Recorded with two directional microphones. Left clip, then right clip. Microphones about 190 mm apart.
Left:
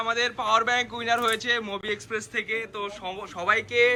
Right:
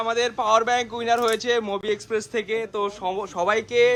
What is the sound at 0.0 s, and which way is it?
Speech, 25° right (ahead or behind).